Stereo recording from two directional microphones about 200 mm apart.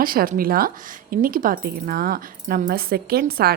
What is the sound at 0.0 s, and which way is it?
Speech, 45° right (ahead or behind).